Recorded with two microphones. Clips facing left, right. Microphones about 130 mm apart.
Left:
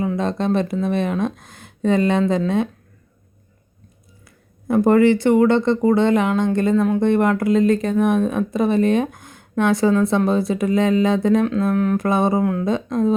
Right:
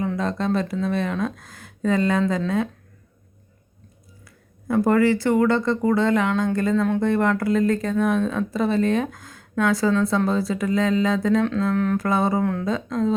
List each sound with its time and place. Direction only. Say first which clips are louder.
0.2 s speech: left 3 dB; 20° left (ahead or behind)
4.7 s speech: left 4 dB; 20° left (ahead or behind)
11.6 s a sound: left 3 dB; 10° left (ahead or behind)
11.9 s speech: left 3 dB; 20° left (ahead or behind)